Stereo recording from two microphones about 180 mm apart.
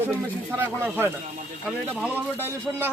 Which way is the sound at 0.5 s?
10° right (ahead or behind).